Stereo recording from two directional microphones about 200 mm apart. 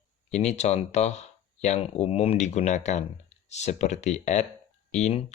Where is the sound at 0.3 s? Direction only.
35° left (ahead or behind).